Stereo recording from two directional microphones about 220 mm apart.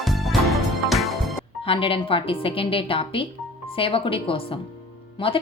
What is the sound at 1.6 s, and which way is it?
A woman's voice, 25° left (ahead or behind).